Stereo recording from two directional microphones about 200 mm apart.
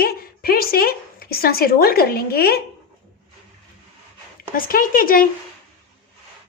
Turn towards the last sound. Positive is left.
turn(degrees=45)  # may be behind; listen again after turning